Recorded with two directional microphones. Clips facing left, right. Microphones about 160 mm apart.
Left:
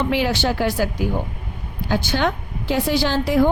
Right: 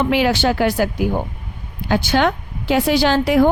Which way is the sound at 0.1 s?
90° right.